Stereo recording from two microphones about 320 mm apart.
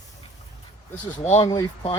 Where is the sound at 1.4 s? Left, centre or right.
Centre.